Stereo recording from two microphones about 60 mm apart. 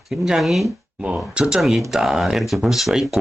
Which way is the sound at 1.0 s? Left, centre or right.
Centre.